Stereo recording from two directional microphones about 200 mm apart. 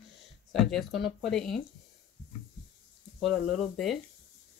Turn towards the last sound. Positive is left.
turn(degrees=0)  # may be behind; listen again after turning